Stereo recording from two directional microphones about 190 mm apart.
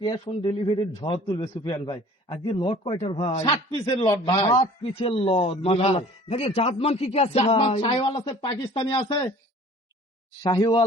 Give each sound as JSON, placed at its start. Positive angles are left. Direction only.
{"t": 0.0, "sound": "a man's voice", "side_deg": 25}
{"t": 10.4, "sound": "a man's voice", "side_deg": 25}